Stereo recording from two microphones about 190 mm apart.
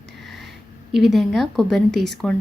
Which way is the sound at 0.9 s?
Centre (ahead or behind).